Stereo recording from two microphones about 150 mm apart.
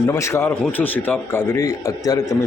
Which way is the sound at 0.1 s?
20° left (ahead or behind).